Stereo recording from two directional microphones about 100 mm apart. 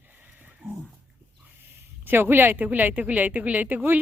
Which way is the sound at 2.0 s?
20° right (ahead or behind).